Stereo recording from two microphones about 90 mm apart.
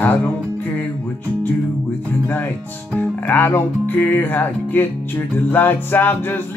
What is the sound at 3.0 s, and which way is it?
Music, 20° left (ahead or behind).